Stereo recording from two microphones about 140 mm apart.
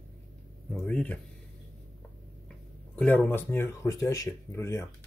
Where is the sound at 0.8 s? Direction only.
10° left (ahead or behind).